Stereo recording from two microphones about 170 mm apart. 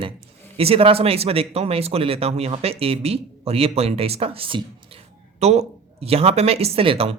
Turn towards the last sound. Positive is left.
turn(degrees=-35)  # may be behind; listen again after turning